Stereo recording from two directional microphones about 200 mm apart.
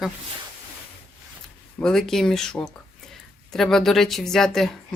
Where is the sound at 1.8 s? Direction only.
5° left (ahead or behind).